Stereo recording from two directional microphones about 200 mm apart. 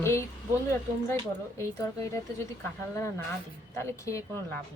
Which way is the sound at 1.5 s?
15° left (ahead or behind).